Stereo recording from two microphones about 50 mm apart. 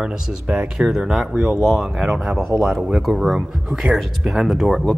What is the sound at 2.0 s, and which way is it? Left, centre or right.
Speech, centre.